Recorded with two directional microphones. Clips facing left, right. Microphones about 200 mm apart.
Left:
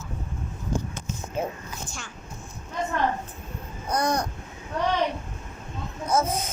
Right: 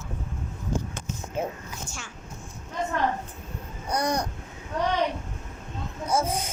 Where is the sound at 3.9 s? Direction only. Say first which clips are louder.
Left 1 dB; 15° right (ahead or behind).